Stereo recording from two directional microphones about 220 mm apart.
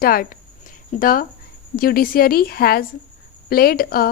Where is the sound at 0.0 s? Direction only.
40° left (ahead or behind).